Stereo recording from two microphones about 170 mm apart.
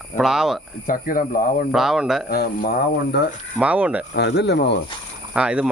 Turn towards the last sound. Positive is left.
turn(degrees=-5)  # may be behind; listen again after turning